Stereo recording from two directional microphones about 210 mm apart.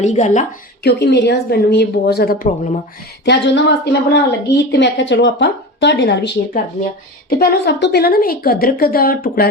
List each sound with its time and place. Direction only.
0.0 s speech: 35° left (ahead or behind)
0.9 s speech: 50° left (ahead or behind)
3.2 s a woman's voice: 55° left (ahead or behind)